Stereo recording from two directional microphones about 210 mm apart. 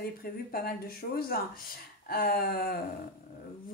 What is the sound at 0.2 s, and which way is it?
A woman's voice, 45° left (ahead or behind).